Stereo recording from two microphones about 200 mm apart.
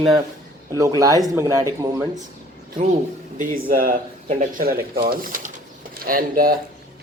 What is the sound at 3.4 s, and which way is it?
Speech, 45° right (ahead or behind).